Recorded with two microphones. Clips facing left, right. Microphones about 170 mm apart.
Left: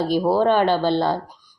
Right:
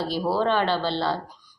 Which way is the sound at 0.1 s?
50° left (ahead or behind).